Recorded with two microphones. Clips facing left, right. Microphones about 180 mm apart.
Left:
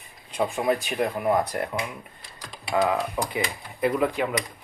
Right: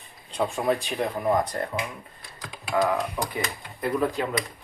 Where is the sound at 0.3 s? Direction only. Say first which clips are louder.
Left 1 dB; 5° left (ahead or behind).